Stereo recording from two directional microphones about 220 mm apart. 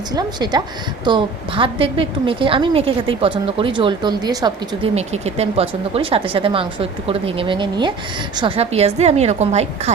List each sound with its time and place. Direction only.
0.1 s a woman's voice: 20° right (ahead or behind)